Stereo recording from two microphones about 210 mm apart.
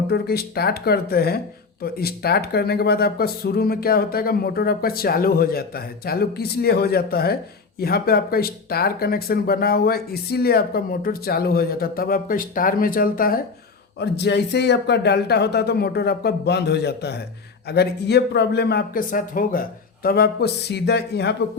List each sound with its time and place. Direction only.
0.1 s speech: 50° left (ahead or behind)
14.0 s speech: 55° left (ahead or behind)